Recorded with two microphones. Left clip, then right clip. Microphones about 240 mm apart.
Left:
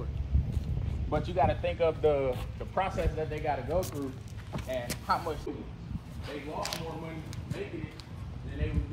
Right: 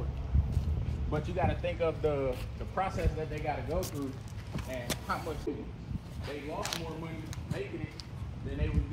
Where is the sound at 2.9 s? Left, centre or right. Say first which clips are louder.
Left 3 dB; centre.